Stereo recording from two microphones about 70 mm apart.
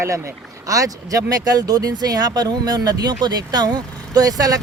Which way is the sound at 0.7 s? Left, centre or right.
Right.